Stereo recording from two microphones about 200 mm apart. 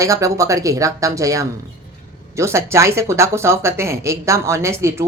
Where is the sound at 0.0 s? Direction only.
15° right (ahead or behind).